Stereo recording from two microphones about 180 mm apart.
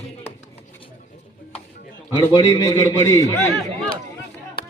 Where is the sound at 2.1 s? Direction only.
25° left (ahead or behind).